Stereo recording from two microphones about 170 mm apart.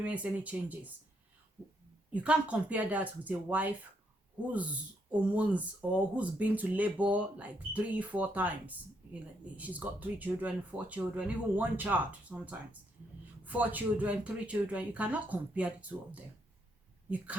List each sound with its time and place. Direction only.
0.0 s speech: 10° right (ahead or behind)
2.2 s speech: 5° right (ahead or behind)